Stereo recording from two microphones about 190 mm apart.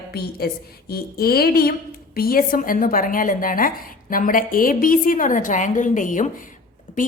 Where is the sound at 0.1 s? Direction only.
55° left (ahead or behind).